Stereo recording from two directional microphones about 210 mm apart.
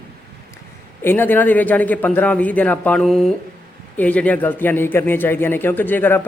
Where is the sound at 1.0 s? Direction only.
10° left (ahead or behind).